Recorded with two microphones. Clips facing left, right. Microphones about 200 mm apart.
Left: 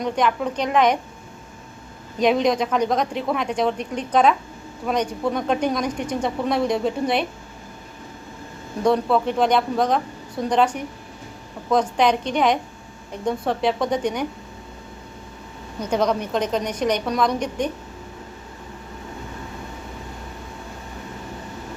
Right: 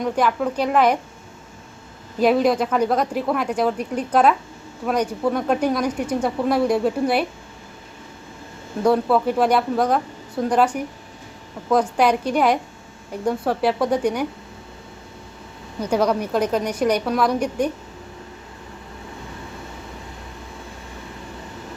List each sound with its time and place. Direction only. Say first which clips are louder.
0.0 s a woman's voice: right 1 dB; 5° right (ahead or behind)
2.1 s a woman's voice: right 2 dB; 5° right (ahead or behind)
8.8 s a woman's voice: right 1 dB; 5° right (ahead or behind)
15.8 s speech: right 2 dB; 10° right (ahead or behind)